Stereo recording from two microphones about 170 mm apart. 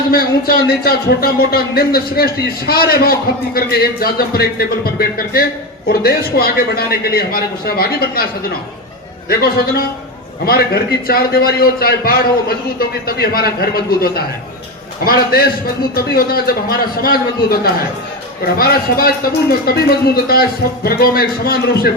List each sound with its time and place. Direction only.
0.1 s speech: 65° left (ahead or behind)
9.3 s speech: 65° left (ahead or behind)